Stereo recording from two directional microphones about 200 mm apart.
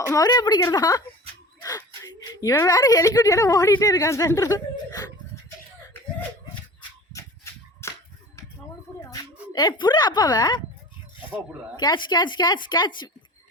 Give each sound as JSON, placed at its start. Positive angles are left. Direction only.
{"t": 0.0, "sound": "a woman's voice", "side_deg": 15}
{"t": 2.4, "sound": "speech", "side_deg": 15}
{"t": 7.8, "sound": "a sound", "side_deg": 15}
{"t": 9.0, "sound": "a woman's voice", "side_deg": 20}
{"t": 11.8, "sound": "speech", "side_deg": 20}